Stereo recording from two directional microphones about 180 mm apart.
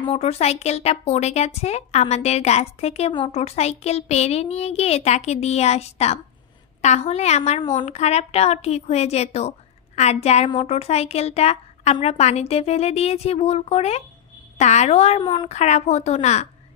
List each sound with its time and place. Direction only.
0.1 s speech: 35° left (ahead or behind)